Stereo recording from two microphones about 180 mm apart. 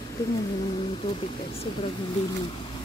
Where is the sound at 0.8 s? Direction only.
30° left (ahead or behind).